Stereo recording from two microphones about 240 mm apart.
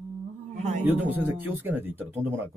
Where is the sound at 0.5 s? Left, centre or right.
Right.